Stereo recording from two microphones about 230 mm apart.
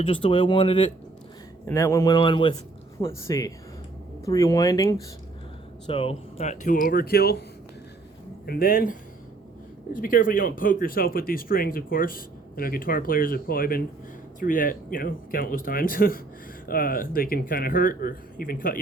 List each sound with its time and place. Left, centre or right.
0.0 s speech: left
8.4 s speech: left